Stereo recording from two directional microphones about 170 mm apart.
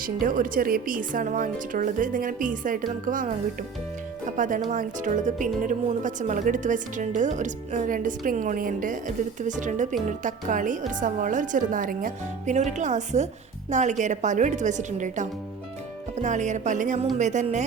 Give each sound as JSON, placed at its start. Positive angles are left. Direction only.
{"t": 0.0, "sound": "speech", "side_deg": -55}